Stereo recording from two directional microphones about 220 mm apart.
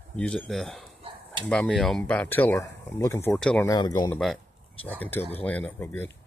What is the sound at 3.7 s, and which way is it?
Speech, 20° left (ahead or behind).